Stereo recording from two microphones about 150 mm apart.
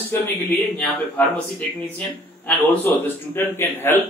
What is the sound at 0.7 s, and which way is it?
Speech, 10° left (ahead or behind).